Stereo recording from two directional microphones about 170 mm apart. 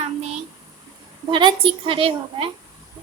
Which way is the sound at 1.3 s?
30° right (ahead or behind).